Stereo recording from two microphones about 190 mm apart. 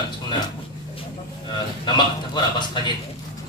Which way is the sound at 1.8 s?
25° left (ahead or behind).